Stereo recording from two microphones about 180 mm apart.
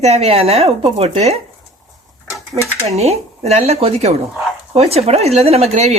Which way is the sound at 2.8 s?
35° right (ahead or behind).